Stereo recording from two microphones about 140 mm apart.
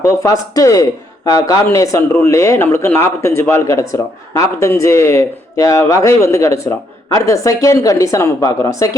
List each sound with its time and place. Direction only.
0.0 s speech: 25° left (ahead or behind)